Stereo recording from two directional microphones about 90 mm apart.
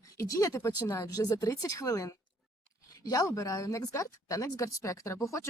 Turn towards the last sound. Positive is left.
turn(degrees=35)  # may be behind; listen again after turning